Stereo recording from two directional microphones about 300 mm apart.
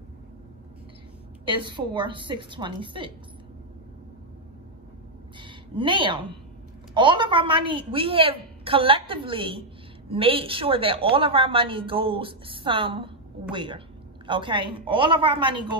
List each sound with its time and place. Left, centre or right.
1.4 s a woman's voice: centre
5.4 s a sound: centre
6.9 s a woman's voice: centre